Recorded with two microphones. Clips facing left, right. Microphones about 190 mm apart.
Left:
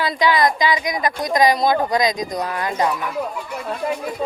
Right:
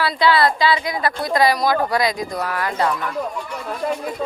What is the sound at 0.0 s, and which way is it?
A woman's voice, 15° left (ahead or behind).